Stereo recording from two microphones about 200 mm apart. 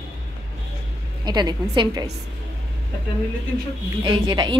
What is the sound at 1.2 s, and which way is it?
Speech, 20° right (ahead or behind).